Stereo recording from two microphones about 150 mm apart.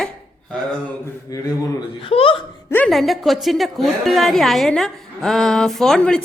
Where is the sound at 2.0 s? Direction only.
40° left (ahead or behind).